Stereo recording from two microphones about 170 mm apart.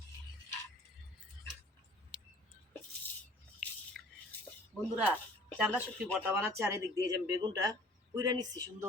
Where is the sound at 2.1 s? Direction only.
5° right (ahead or behind).